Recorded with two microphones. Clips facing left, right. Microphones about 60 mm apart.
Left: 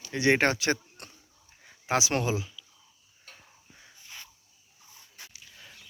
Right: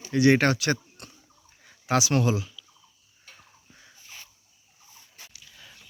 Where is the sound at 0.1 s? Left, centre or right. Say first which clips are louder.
Right 4 dB; left.